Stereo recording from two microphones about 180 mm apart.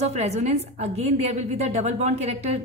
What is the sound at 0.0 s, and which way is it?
A woman's voice, 40° right (ahead or behind).